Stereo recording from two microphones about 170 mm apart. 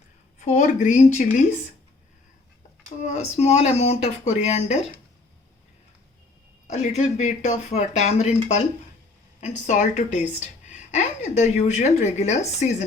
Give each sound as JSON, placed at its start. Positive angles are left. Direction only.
{"t": 0.3, "sound": "speech", "side_deg": 45}
{"t": 3.0, "sound": "speech", "side_deg": 40}
{"t": 6.7, "sound": "speech", "side_deg": 40}
{"t": 9.4, "sound": "speech", "side_deg": 45}